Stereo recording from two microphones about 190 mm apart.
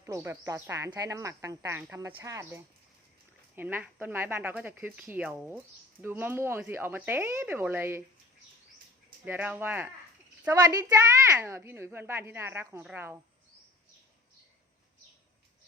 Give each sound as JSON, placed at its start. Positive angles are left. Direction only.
{"t": 0.0, "sound": "speech", "side_deg": -15}
{"t": 9.2, "sound": "speech", "side_deg": -10}